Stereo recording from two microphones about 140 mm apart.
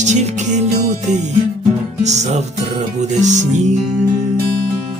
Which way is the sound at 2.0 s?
55° right (ahead or behind).